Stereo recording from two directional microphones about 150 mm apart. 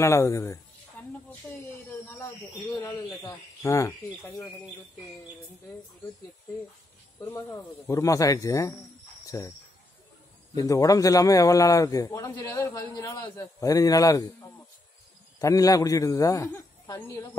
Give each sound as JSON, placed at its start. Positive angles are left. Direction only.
{"t": 0.0, "sound": "a man's voice", "side_deg": 20}
{"t": 1.0, "sound": "a sound", "side_deg": 10}
{"t": 3.2, "sound": "a man's voice", "side_deg": 20}
{"t": 7.2, "sound": "a man's voice", "side_deg": 15}
{"t": 9.2, "sound": "cricket", "side_deg": 20}
{"t": 10.5, "sound": "a man's voice", "side_deg": 25}
{"t": 15.3, "sound": "a man's voice", "side_deg": 20}